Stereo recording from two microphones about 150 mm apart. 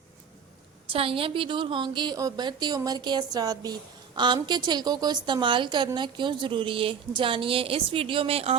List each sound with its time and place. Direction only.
0.9 s a woman's voice: 40° right (ahead or behind)